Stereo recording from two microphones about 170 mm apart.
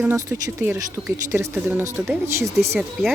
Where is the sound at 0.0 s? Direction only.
15° right (ahead or behind).